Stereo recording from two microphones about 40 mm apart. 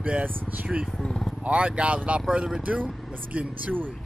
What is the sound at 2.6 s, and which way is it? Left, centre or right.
Speech, right.